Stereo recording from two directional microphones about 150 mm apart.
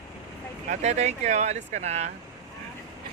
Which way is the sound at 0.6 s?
50° right (ahead or behind).